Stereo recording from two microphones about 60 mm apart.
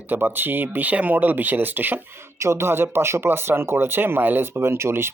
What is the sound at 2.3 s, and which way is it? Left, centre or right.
Speech, right.